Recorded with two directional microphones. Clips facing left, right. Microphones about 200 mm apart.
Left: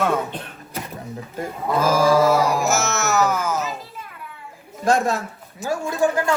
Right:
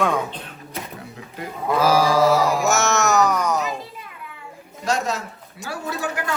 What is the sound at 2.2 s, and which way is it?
Music, centre (ahead or behind).